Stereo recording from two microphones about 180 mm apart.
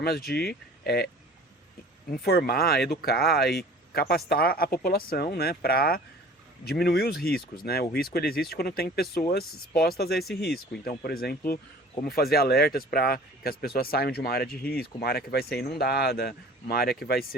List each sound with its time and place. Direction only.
0.0 s speech: 60° left (ahead or behind)